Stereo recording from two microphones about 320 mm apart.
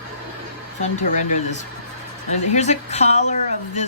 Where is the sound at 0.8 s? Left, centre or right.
Left.